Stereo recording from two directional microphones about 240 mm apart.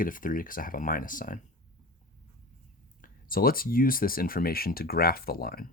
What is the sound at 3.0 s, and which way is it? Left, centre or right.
Speech, left.